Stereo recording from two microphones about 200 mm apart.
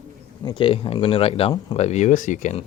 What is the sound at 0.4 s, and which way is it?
Speech, 25° left (ahead or behind).